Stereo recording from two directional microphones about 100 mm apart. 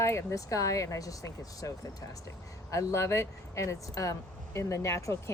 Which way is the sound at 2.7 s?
35° left (ahead or behind).